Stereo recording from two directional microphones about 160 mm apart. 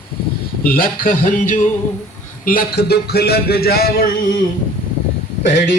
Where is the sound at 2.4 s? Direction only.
65° left (ahead or behind).